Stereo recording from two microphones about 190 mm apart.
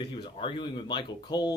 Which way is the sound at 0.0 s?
25° left (ahead or behind).